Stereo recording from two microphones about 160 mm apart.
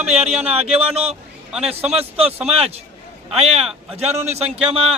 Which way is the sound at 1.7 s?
40° right (ahead or behind).